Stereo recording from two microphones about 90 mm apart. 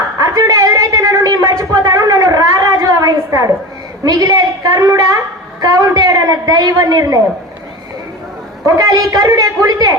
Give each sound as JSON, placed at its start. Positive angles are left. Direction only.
{"t": 0.2, "sound": "a sound", "side_deg": -40}
{"t": 4.0, "sound": "a woman's voice", "side_deg": -45}
{"t": 8.6, "sound": "a woman's voice", "side_deg": -45}